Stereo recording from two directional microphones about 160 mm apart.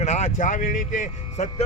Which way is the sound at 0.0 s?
45° left (ahead or behind).